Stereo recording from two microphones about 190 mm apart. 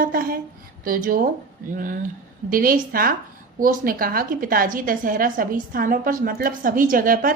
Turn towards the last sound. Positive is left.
turn(degrees=-45)  # may be behind; listen again after turning